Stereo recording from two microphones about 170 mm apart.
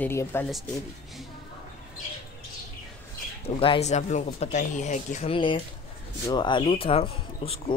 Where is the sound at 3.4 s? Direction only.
30° left (ahead or behind).